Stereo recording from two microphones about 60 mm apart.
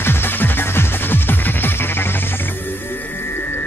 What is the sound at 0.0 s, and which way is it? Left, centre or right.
Music, left.